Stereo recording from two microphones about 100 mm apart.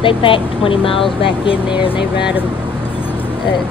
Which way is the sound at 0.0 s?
60° left (ahead or behind).